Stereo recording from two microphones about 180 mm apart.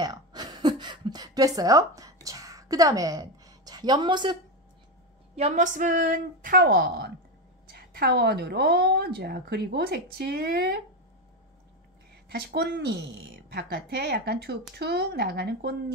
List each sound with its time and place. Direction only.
0.0 s a sound: 25° right (ahead or behind)
5.3 s a woman's voice: 40° right (ahead or behind); by 10.8 s 60° right (ahead or behind)
12.3 s a woman's voice: 60° right (ahead or behind)